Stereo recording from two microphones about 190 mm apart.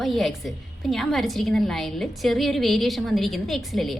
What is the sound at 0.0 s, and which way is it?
A woman's voice, centre (ahead or behind).